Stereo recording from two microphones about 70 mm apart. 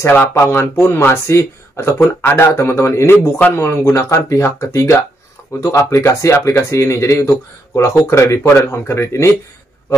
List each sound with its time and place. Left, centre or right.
0.0 s speech: left